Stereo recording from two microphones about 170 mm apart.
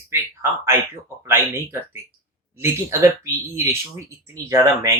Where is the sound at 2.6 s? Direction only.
15° right (ahead or behind).